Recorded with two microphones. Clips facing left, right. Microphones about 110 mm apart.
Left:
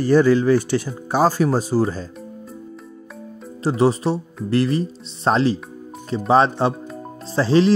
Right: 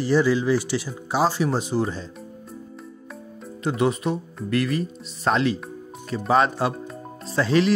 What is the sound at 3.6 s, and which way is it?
Speech, 35° left (ahead or behind).